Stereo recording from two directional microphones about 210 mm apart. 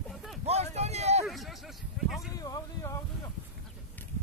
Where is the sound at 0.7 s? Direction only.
30° right (ahead or behind).